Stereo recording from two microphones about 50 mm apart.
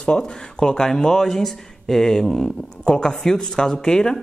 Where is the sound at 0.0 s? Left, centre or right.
Centre.